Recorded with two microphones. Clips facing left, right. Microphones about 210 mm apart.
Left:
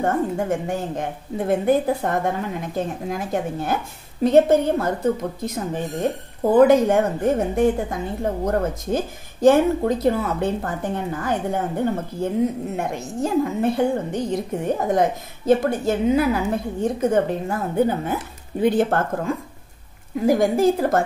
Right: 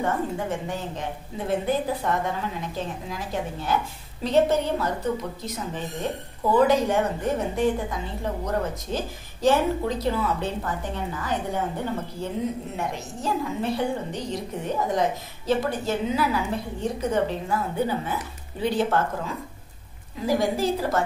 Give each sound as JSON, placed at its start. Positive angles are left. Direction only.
{"t": 0.0, "sound": "a woman's voice", "side_deg": 50}